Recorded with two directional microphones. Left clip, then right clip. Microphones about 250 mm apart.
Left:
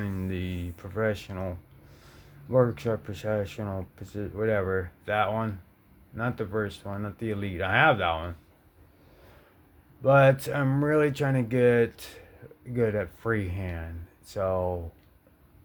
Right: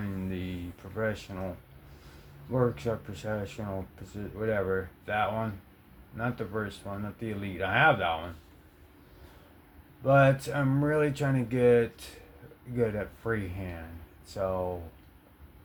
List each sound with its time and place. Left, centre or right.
0.0 s a sound: left
2.5 s speech: left
10.0 s speech: left